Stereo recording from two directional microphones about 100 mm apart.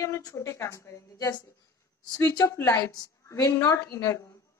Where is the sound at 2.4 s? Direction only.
30° left (ahead or behind).